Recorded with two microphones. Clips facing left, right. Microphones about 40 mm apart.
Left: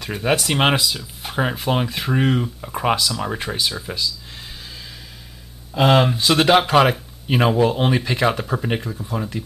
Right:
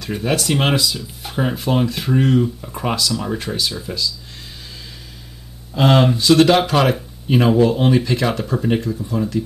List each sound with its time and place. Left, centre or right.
0.2 s speech: centre
5.8 s speech: centre
6.1 s speech: centre